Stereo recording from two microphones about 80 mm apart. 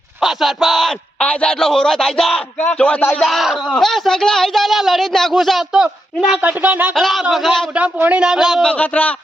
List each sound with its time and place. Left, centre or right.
0.2 s a man's voice: centre
1.2 s a man's voice: centre
2.6 s a man's voice: centre
3.2 s speech: centre
6.4 s speech: centre
6.9 s speech: centre
7.9 s speech: right
8.2 s a man's voice: centre
8.6 s a man's voice: centre